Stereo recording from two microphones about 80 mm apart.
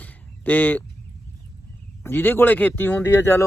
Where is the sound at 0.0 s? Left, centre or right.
Left.